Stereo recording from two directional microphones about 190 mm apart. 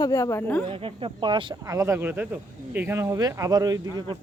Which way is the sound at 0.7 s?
30° right (ahead or behind).